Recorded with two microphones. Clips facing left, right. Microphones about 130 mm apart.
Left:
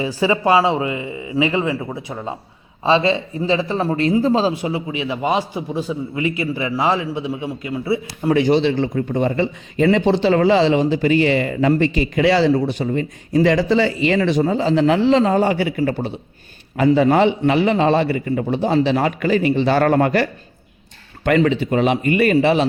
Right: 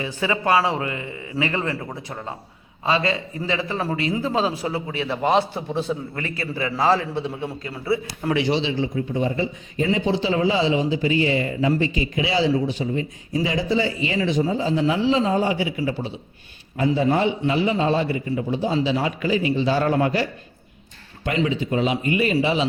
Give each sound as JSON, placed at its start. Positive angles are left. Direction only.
{"t": 0.0, "sound": "a man's voice", "side_deg": 25}
{"t": 2.8, "sound": "a man's voice", "side_deg": 25}
{"t": 4.6, "sound": "a man's voice", "side_deg": 15}
{"t": 8.3, "sound": "a man's voice", "side_deg": 45}
{"t": 16.7, "sound": "speech", "side_deg": 80}
{"t": 21.2, "sound": "speech", "side_deg": 65}